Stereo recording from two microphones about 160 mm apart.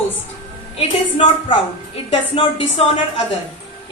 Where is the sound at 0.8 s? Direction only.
40° left (ahead or behind).